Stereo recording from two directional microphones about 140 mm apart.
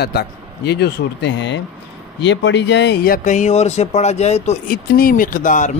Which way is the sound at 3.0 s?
75° left (ahead or behind).